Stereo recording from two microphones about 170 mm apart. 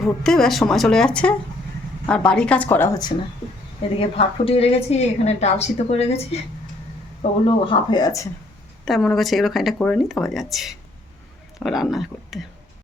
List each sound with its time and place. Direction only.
0.0 s a woman's voice: centre (ahead or behind)
4.2 s a woman's voice: 35° left (ahead or behind)
8.8 s speech: centre (ahead or behind)